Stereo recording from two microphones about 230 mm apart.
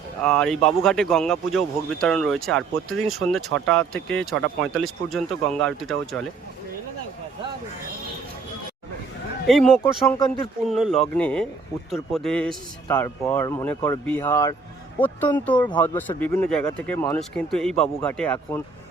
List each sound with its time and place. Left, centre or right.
0.2 s speech: centre
9.5 s a man's voice: centre
15.5 s speech: centre
15.8 s a man's voice: centre